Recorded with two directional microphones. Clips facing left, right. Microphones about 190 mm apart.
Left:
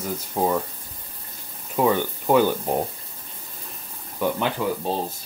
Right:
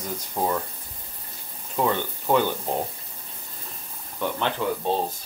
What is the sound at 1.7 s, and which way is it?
Speech, 10° left (ahead or behind).